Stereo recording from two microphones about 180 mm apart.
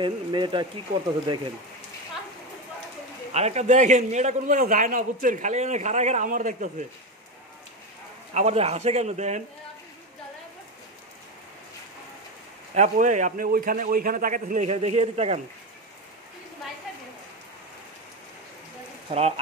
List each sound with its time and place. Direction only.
0.0 s speech: 25° right (ahead or behind)
3.3 s a man's voice: 40° right (ahead or behind)
8.3 s a man's voice: 35° right (ahead or behind)
12.7 s a man's voice: 40° right (ahead or behind)
19.0 s a man's voice: 35° right (ahead or behind)